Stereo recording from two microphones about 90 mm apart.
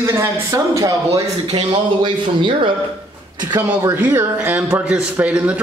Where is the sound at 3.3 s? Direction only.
50° right (ahead or behind).